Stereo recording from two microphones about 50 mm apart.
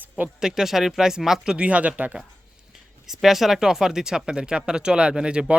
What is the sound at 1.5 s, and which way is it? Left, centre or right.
Speech, right.